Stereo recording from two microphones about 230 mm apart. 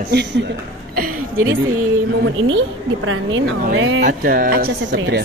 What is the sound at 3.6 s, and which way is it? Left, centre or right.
Speech, right.